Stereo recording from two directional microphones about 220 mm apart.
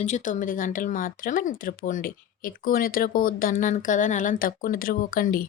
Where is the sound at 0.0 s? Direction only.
35° left (ahead or behind).